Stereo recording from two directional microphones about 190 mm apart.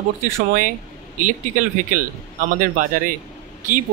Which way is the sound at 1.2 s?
45° right (ahead or behind).